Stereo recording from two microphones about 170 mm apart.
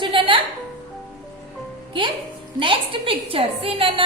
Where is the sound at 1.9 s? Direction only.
30° right (ahead or behind).